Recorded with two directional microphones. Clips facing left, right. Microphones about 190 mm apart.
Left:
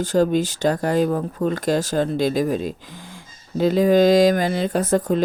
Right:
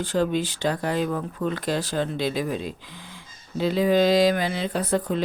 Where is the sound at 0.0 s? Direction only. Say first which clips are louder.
Left 5 dB; 40° left (ahead or behind).